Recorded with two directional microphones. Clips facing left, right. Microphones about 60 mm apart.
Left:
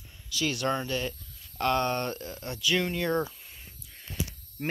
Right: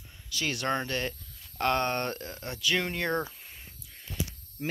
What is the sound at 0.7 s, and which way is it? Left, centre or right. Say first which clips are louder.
Speech: even; right.